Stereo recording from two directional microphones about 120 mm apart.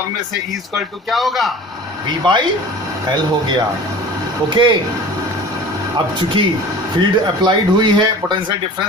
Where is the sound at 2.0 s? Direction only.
40° right (ahead or behind).